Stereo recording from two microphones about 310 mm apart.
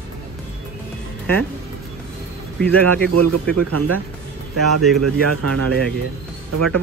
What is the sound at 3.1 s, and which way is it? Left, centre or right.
Speech, right.